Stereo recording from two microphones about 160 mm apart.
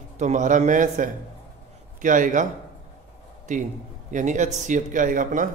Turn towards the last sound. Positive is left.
turn(degrees=-55)  # may be behind; listen again after turning